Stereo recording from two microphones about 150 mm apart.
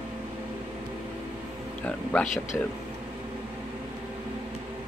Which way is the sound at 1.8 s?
10° left (ahead or behind).